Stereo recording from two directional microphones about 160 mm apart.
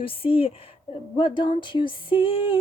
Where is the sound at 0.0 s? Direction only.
35° left (ahead or behind).